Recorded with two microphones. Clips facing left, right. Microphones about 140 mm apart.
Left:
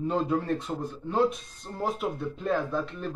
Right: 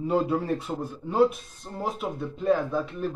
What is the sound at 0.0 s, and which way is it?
A man's voice, 5° right (ahead or behind).